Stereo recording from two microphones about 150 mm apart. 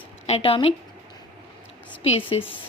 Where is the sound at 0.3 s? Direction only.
40° left (ahead or behind).